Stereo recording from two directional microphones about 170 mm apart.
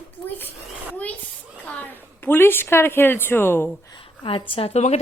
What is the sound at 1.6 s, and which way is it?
A woman's voice, 10° left (ahead or behind).